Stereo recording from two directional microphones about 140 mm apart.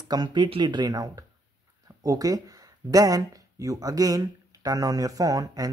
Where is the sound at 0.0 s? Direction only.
30° right (ahead or behind).